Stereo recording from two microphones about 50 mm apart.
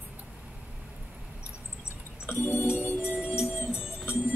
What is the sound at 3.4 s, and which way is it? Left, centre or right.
Music, centre.